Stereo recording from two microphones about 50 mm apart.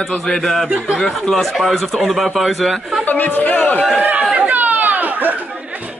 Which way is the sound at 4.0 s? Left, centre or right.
Right.